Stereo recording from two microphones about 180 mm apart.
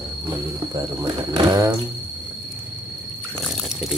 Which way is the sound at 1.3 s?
20° right (ahead or behind).